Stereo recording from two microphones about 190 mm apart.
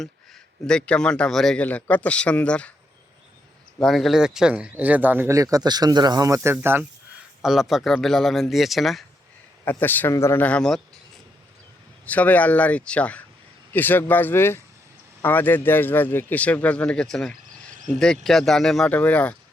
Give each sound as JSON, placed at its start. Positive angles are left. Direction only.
{"t": 0.7, "sound": "a man's voice", "side_deg": 5}
{"t": 3.8, "sound": "a man's voice", "side_deg": 0}
{"t": 12.0, "sound": "a man's voice", "side_deg": 10}
{"t": 17.7, "sound": "cricket", "side_deg": -40}
{"t": 18.0, "sound": "a man's voice", "side_deg": 0}